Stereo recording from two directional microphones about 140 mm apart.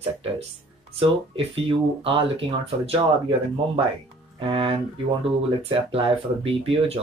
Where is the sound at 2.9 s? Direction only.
40° right (ahead or behind).